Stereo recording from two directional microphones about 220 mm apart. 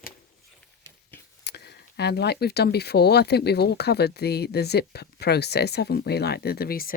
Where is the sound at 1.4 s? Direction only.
50° left (ahead or behind).